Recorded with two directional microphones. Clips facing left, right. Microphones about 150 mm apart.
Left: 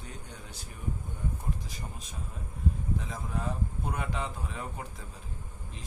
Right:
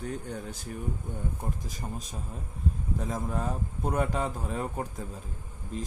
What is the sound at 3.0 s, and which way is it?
Speech, 45° right (ahead or behind).